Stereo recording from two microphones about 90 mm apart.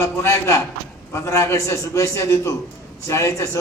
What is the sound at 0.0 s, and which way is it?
A man's voice, 30° left (ahead or behind).